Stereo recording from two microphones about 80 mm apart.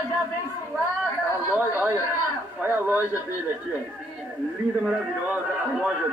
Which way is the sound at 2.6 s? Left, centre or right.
Right.